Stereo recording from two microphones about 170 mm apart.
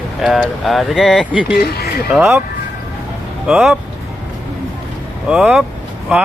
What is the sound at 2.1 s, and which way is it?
Speech, centre (ahead or behind).